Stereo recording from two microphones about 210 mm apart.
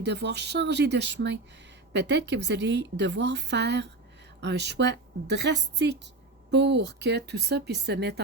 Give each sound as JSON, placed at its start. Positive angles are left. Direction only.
{"t": 0.0, "sound": "a woman's voice", "side_deg": -55}